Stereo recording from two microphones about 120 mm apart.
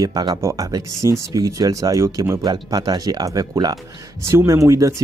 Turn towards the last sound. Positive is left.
turn(degrees=-25)  # may be behind; listen again after turning